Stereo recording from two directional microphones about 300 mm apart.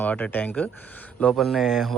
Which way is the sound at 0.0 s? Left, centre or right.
Centre.